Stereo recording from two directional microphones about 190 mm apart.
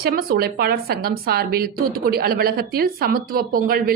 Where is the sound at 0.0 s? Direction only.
50° right (ahead or behind).